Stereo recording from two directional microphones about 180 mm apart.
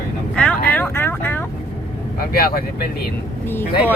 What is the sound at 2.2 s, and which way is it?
Speech, 55° left (ahead or behind).